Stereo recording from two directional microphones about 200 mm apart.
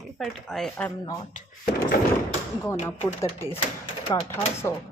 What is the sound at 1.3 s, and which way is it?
Speech, 45° left (ahead or behind).